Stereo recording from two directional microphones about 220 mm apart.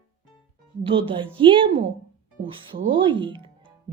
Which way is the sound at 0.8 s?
25° right (ahead or behind).